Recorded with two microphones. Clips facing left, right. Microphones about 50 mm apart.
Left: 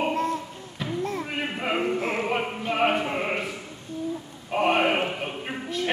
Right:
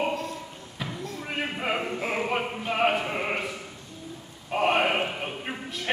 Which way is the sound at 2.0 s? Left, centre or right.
Centre.